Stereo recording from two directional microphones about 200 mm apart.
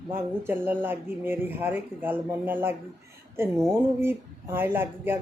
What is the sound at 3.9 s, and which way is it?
Speech, 10° right (ahead or behind).